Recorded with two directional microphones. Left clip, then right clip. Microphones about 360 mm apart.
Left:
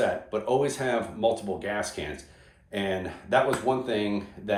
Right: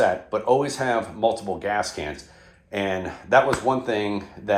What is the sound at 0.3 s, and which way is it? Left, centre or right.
Speech, centre.